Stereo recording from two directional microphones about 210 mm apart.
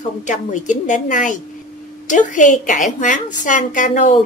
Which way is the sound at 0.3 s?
35° left (ahead or behind).